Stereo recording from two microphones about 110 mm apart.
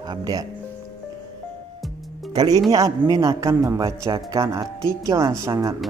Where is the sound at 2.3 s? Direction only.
35° right (ahead or behind).